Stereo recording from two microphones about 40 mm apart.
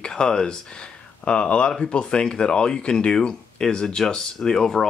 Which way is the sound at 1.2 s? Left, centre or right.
Left.